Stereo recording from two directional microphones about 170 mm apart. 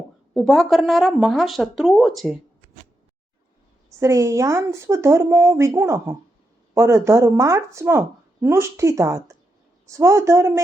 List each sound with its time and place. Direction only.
0.3 s speech: centre (ahead or behind)
4.0 s speech: 20° right (ahead or behind)